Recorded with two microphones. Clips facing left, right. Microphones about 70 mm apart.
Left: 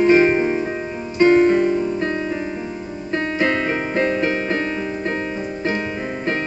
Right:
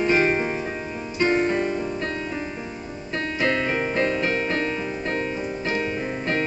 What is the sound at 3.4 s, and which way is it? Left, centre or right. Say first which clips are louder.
Music: left 2 dB; left.